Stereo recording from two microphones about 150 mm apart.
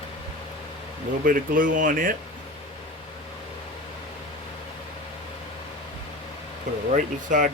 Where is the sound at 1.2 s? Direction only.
65° right (ahead or behind).